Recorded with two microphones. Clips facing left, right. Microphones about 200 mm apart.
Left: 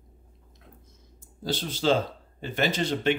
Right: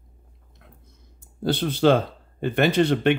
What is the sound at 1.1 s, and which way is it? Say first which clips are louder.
Speech: right 7 dB; 60° right (ahead or behind).